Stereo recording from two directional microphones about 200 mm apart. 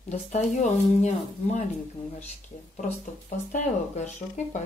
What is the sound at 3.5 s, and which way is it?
A woman's voice, 35° left (ahead or behind).